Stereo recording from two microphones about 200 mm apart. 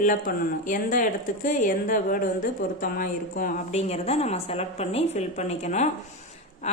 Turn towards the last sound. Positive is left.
turn(degrees=35)  # may be behind; listen again after turning